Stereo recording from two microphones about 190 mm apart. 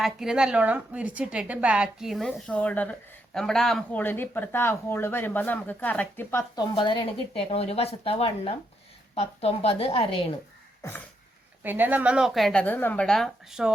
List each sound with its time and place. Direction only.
0.0 s a woman's voice: 5° right (ahead or behind)
6.7 s a woman's voice: 25° left (ahead or behind)
10.8 s speech: 15° left (ahead or behind)
11.6 s a woman's voice: 10° right (ahead or behind)